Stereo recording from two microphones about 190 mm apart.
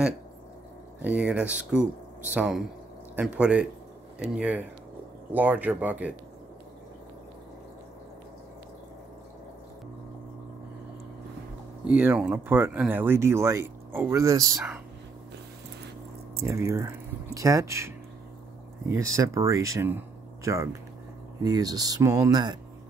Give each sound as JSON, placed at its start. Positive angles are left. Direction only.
{"t": 1.0, "sound": "speech", "side_deg": -5}
{"t": 11.8, "sound": "speech", "side_deg": -10}
{"t": 16.3, "sound": "speech", "side_deg": -15}